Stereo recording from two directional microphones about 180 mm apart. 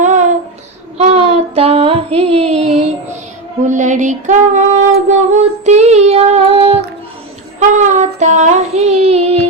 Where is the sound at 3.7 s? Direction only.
45° right (ahead or behind).